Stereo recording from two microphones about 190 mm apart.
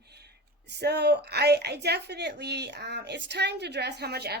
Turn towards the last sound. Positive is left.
turn(degrees=-60)  # may be behind; listen again after turning